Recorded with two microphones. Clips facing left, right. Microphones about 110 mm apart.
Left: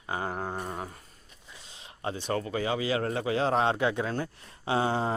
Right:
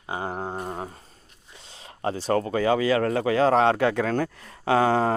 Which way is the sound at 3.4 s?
50° right (ahead or behind).